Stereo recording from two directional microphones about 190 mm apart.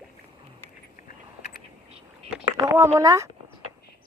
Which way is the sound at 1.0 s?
55° left (ahead or behind).